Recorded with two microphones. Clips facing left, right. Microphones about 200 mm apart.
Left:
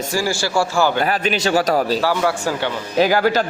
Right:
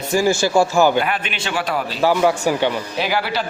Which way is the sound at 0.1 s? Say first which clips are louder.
Right 6 dB; 20° right (ahead or behind).